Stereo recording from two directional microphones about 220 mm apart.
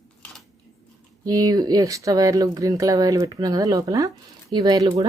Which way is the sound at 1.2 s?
15° right (ahead or behind).